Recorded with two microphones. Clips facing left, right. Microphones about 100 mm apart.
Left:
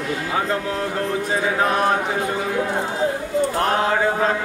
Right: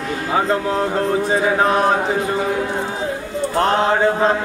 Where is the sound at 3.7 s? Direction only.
25° right (ahead or behind).